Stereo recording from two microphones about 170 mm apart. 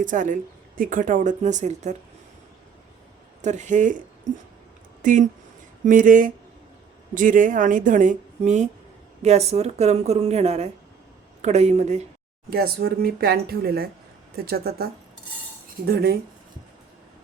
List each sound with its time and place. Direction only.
0.0 s speech: 50° right (ahead or behind)
3.4 s speech: 45° right (ahead or behind)
5.0 s a woman's voice: 50° right (ahead or behind)
12.5 s speech: 65° right (ahead or behind)
15.9 s speech: 65° right (ahead or behind)